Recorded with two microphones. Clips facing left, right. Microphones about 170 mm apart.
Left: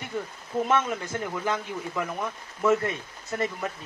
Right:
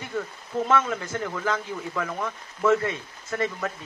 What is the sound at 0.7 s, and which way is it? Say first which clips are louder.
Speech: right 2 dB; 15° left (ahead or behind).